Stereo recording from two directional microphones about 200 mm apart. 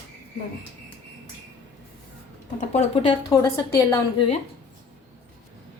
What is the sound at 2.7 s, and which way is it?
A woman's voice, 30° left (ahead or behind).